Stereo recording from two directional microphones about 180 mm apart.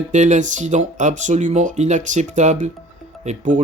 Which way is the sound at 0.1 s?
40° right (ahead or behind).